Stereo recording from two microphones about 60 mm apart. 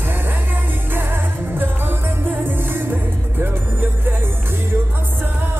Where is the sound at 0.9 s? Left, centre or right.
Right.